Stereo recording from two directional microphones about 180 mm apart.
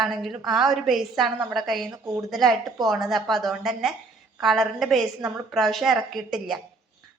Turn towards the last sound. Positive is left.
turn(degrees=0)  # may be behind; listen again after turning